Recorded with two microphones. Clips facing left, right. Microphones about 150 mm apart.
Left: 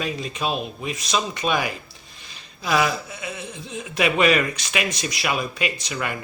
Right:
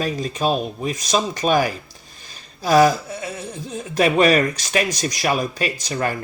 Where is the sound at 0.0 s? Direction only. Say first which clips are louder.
Right 5 dB; 40° right (ahead or behind).